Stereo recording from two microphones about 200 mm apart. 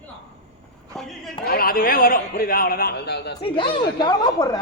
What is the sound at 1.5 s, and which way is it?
Speech, 50° left (ahead or behind).